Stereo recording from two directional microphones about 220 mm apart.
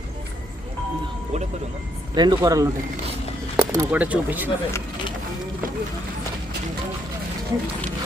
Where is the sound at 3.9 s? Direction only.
5° right (ahead or behind).